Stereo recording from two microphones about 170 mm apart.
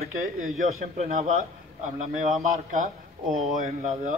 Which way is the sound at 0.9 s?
40° right (ahead or behind).